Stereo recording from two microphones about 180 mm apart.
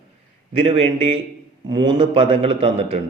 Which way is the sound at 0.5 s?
30° right (ahead or behind).